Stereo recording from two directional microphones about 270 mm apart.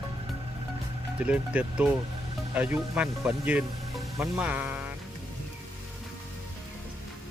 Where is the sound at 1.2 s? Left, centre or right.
Centre.